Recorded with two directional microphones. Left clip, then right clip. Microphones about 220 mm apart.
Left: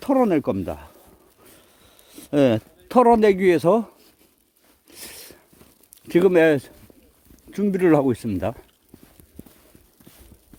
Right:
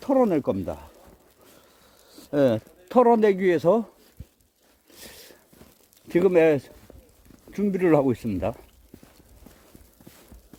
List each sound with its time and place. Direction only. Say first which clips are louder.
0.0 s speech: left 2 dB; 40° left (ahead or behind)
2.0 s speech: left 3 dB; 40° left (ahead or behind)
4.9 s a sound: left 4 dB; 40° left (ahead or behind)
6.1 s speech: left 3 dB; 35° left (ahead or behind)